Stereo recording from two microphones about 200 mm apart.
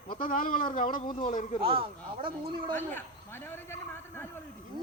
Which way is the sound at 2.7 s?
10° left (ahead or behind).